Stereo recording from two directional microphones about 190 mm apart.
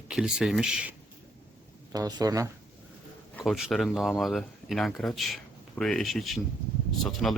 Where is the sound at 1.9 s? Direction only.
20° right (ahead or behind).